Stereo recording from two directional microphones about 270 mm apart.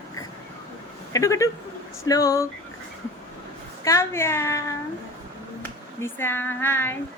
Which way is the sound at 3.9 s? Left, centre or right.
Centre.